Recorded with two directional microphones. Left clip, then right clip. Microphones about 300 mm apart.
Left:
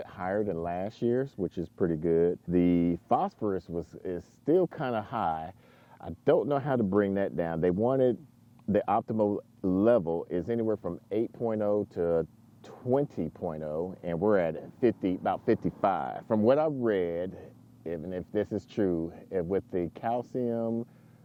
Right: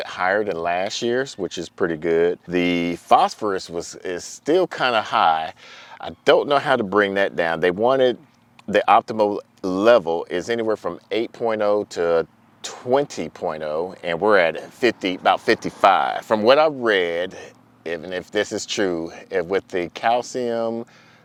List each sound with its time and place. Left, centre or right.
0.0 s speech: centre
10.7 s speech: centre
11.1 s speech: centre